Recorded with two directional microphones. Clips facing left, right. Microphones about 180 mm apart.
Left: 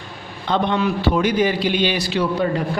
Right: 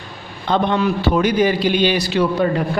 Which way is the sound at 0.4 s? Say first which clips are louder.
Right 2 dB; 45° right (ahead or behind).